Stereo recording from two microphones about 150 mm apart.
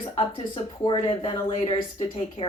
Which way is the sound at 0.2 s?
35° left (ahead or behind).